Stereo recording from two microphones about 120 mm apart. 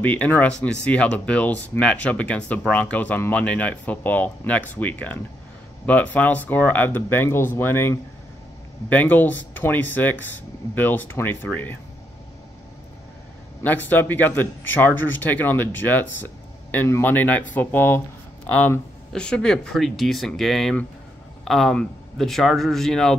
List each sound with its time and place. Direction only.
0.0 s speech: 15° left (ahead or behind)
13.6 s speech: 15° left (ahead or behind)